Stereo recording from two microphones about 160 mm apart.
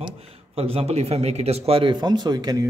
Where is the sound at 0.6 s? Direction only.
40° right (ahead or behind).